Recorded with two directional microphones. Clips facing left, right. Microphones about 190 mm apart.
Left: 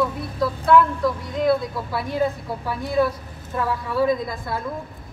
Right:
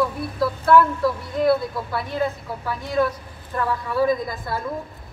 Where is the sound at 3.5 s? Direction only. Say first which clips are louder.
Even; centre (ahead or behind).